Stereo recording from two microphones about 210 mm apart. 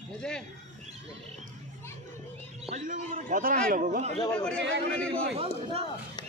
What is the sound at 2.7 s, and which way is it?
A man's voice, 35° right (ahead or behind).